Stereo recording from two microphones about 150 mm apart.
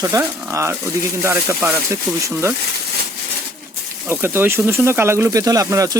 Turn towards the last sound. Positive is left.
turn(degrees=-20)  # may be behind; listen again after turning